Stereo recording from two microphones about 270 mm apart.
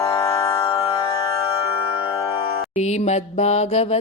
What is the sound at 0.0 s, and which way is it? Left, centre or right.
Music, centre.